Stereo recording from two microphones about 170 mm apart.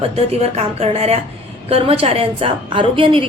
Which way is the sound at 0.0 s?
35° right (ahead or behind).